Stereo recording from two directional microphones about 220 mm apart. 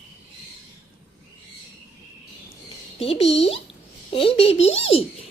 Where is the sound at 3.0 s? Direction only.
25° left (ahead or behind).